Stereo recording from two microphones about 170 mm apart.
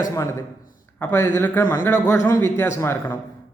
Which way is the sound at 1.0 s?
10° left (ahead or behind).